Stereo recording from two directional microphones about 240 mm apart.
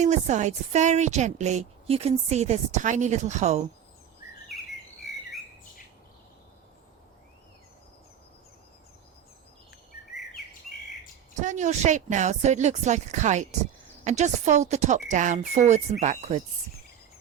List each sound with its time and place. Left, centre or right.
0.0 s a woman's voice: right
11.3 s a woman's voice: right